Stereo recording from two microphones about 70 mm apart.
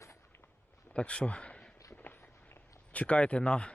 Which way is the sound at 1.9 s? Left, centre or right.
Left.